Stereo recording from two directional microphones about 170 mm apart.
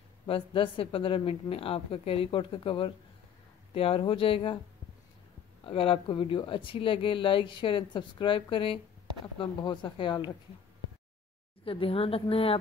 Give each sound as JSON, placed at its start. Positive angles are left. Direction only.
{"t": 0.3, "sound": "a woman's voice", "side_deg": 30}
{"t": 5.6, "sound": "speech", "side_deg": 35}
{"t": 11.6, "sound": "a woman's voice", "side_deg": 35}